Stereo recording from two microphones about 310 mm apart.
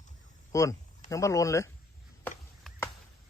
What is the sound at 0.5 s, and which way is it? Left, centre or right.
Speech, centre.